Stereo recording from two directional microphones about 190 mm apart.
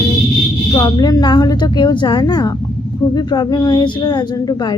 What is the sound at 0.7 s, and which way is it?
A woman's voice, 20° left (ahead or behind).